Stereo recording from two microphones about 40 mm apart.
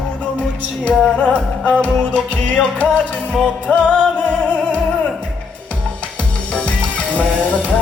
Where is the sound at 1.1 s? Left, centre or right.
Left.